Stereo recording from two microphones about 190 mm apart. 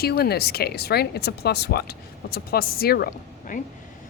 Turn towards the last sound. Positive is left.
turn(degrees=50)  # may be behind; listen again after turning